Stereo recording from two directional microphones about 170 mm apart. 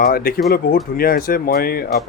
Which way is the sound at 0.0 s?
60° left (ahead or behind).